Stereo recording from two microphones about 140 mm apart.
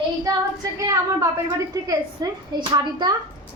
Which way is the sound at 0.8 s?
25° right (ahead or behind).